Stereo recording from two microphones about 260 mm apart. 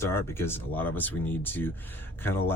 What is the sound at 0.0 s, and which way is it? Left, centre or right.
Speech, centre.